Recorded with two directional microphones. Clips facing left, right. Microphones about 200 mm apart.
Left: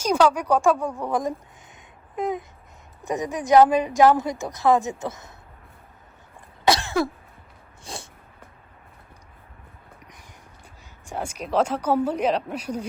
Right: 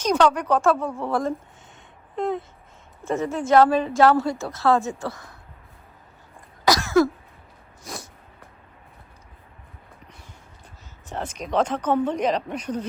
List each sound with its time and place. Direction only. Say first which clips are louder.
0.0 s speech: even; 10° left (ahead or behind)
2.1 s a sound: right 1 dB; 15° left (ahead or behind)
3.1 s speech: even; 15° left (ahead or behind)
6.7 s cough: right 3 dB; 30° left (ahead or behind)
7.9 s dog: right 1 dB; 30° left (ahead or behind)
11.0 s speech: even; 10° left (ahead or behind)